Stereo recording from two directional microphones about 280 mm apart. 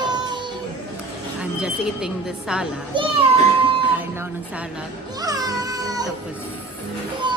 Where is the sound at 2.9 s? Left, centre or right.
Centre.